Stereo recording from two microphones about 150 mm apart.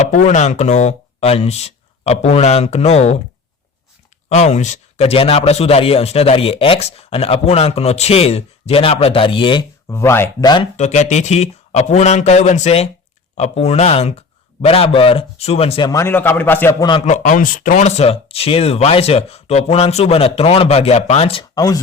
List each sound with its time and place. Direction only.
0.1 s speech: 55° left (ahead or behind)
4.3 s speech: 50° left (ahead or behind); by 9.6 s 35° left (ahead or behind)
9.9 s a man's voice: 15° left (ahead or behind)
10.4 s speech: 30° left (ahead or behind)
10.8 s speech: 50° left (ahead or behind)
15.9 s a man's voice: 15° left (ahead or behind)
17.1 s speech: 60° left (ahead or behind); by 21.4 s 40° left (ahead or behind)
21.5 s speech: 25° left (ahead or behind)